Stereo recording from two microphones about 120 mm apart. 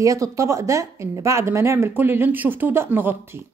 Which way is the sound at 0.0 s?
25° right (ahead or behind).